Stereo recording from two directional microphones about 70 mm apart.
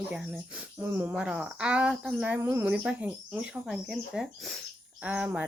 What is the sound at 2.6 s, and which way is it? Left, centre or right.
Speech, centre.